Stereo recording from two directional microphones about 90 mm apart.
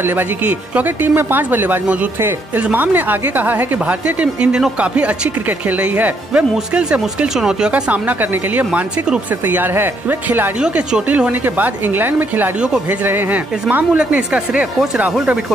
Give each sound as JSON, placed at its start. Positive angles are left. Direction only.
{"t": 0.0, "sound": "speech", "side_deg": -20}
{"t": 10.6, "sound": "speech", "side_deg": -10}